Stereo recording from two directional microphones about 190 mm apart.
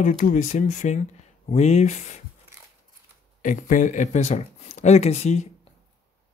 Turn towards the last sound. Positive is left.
turn(degrees=35)  # may be behind; listen again after turning